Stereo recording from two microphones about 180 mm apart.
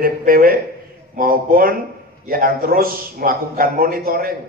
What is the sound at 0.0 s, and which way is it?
A man's voice, 50° right (ahead or behind).